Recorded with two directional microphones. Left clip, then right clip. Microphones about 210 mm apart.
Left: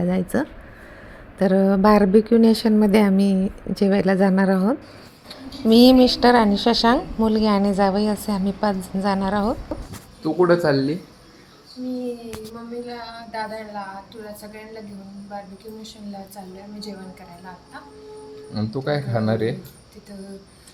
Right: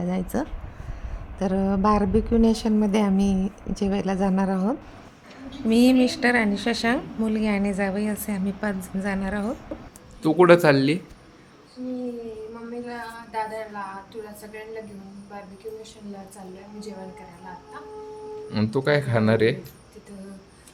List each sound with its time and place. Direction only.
0.0 s speech: 10° left (ahead or behind)
10.2 s speech: 20° right (ahead or behind)
10.6 s speech: 5° right (ahead or behind)
13.3 s speech: centre (ahead or behind)
18.5 s speech: 5° right (ahead or behind)